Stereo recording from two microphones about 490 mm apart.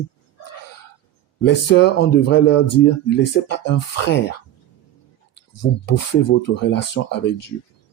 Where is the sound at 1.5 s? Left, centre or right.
Left.